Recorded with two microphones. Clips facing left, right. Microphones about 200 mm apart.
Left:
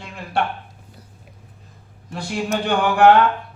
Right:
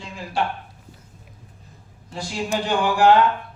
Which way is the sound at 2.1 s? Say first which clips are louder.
Left 2 dB; 60° left (ahead or behind).